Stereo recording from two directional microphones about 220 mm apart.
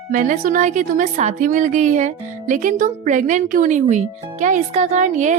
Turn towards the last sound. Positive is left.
turn(degrees=-35)  # may be behind; listen again after turning